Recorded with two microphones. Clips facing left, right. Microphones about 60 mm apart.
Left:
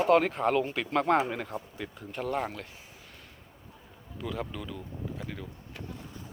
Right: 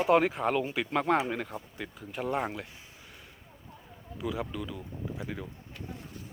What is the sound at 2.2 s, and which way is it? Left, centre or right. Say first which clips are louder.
Speech: right 1 dB; centre.